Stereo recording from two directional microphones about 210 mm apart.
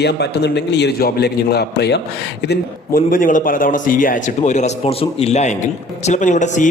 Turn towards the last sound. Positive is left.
turn(degrees=35)  # may be behind; listen again after turning